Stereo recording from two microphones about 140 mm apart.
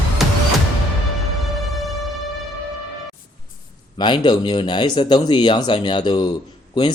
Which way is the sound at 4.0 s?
35° left (ahead or behind).